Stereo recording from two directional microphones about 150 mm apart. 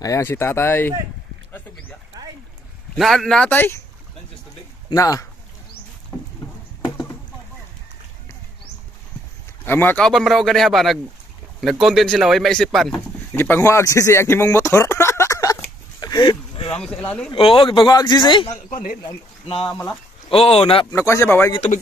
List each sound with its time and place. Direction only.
0.0 s speech: 20° left (ahead or behind)
3.0 s speech: centre (ahead or behind)
4.9 s speech: 20° left (ahead or behind)
6.4 s a sound: 20° left (ahead or behind)
9.7 s speech: 15° left (ahead or behind); by 16.3 s 30° left (ahead or behind)
16.5 s a sound: 40° left (ahead or behind)
16.8 s speech: 10° left (ahead or behind)
17.3 s speech: 35° left (ahead or behind)
18.7 s speech: 65° left (ahead or behind)
19.0 s speech: 35° left (ahead or behind)
19.7 s speech: 5° left (ahead or behind)
20.2 s speech: 40° left (ahead or behind)
20.9 s speech: 20° left (ahead or behind)